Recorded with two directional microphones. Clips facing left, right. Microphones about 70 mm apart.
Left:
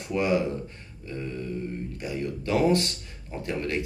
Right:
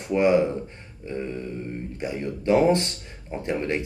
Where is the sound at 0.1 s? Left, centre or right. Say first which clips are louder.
Right 5 dB; right.